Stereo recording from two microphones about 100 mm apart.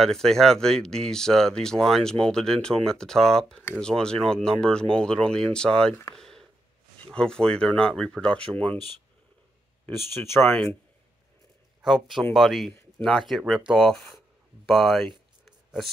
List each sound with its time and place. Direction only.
0.0 s speech: 5° left (ahead or behind)
6.1 s a sound: 5° left (ahead or behind)
7.1 s speech: 5° left (ahead or behind)
9.8 s speech: 25° left (ahead or behind)
11.8 s speech: centre (ahead or behind)
14.7 s a sound: 5° left (ahead or behind)